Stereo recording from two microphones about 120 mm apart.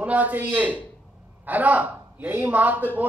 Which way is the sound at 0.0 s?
10° right (ahead or behind).